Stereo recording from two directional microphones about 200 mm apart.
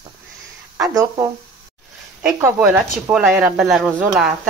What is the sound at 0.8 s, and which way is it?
Speech, 20° right (ahead or behind).